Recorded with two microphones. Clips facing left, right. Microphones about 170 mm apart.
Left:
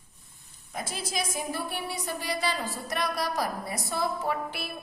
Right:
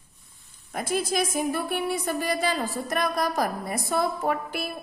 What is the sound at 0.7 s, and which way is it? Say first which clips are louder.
A woman's voice: right 8 dB; 55° right (ahead or behind).